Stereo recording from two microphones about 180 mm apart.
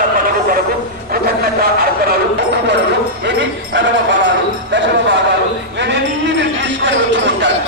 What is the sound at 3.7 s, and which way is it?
Music, 85° right.